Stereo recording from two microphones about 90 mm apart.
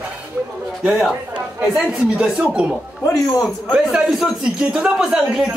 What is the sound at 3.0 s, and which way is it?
Speech, 35° left (ahead or behind).